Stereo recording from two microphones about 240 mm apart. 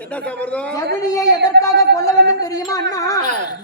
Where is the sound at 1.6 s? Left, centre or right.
Right.